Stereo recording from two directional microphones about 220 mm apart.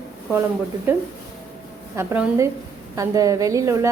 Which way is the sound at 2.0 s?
10° right (ahead or behind).